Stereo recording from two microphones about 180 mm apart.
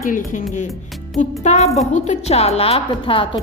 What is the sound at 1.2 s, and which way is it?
A woman's voice, 40° left (ahead or behind).